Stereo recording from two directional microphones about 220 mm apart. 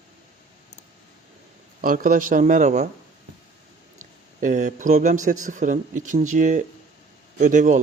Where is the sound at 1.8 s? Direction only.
40° right (ahead or behind).